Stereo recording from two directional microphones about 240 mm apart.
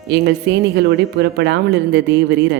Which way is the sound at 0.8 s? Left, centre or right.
Right.